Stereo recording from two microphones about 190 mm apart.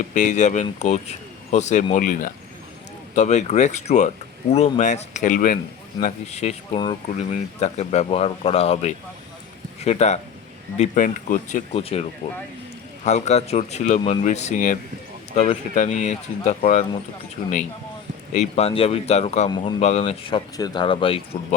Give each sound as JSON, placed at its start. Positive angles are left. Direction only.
{"t": 0.0, "sound": "speech", "side_deg": 40}
{"t": 11.8, "sound": "speech", "side_deg": 30}
{"t": 13.1, "sound": "speech", "side_deg": 35}
{"t": 19.5, "sound": "speech", "side_deg": 20}
{"t": 19.8, "sound": "speech", "side_deg": 35}